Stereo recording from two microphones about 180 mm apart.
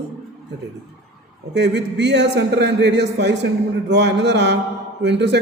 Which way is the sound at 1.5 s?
70° right (ahead or behind).